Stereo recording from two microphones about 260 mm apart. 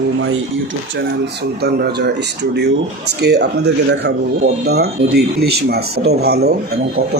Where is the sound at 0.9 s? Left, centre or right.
Right.